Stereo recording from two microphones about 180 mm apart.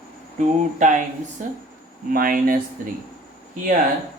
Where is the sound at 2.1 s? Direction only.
50° right (ahead or behind).